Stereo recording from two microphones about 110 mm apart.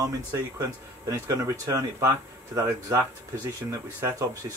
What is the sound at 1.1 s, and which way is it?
Speech, 30° right (ahead or behind).